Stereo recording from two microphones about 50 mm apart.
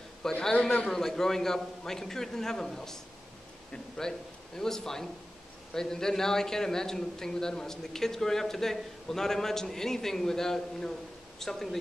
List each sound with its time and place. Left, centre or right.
0.4 s a man's voice: centre
0.8 s a man's voice: centre